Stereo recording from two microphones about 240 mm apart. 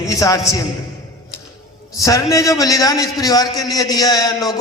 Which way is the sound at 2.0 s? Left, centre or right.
Centre.